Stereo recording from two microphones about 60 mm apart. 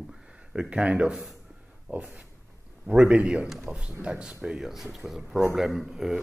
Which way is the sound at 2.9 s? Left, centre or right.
Centre.